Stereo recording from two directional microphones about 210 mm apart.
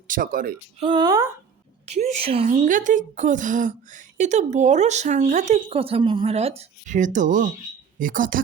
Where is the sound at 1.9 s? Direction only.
35° right (ahead or behind).